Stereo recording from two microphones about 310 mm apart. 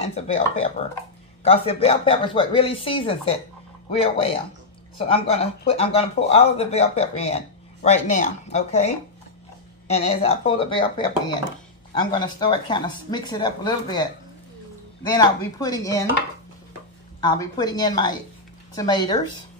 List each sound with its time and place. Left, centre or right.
0.0 s speech: centre
15.0 s speech: centre
17.2 s speech: centre